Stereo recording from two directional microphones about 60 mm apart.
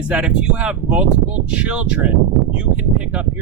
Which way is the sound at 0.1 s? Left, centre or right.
Centre.